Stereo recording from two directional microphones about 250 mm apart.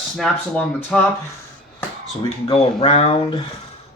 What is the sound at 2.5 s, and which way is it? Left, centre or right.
Speech, left.